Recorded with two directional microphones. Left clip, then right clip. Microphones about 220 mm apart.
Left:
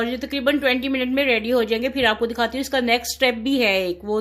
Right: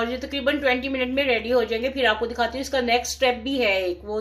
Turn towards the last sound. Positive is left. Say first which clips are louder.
# left 2 dB
turn(degrees=50)  # may be behind; listen again after turning